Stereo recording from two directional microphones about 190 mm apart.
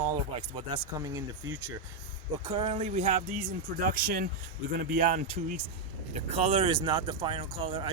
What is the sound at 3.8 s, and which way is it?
Speech, 50° right (ahead or behind).